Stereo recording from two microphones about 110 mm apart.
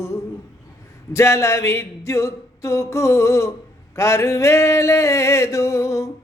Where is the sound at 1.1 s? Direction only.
25° left (ahead or behind).